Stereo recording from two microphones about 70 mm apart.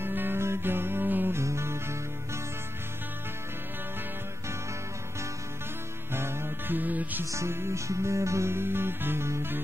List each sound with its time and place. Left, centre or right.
0.0 s music: right
1.4 s music: right
6.1 s music: right
7.2 s music: right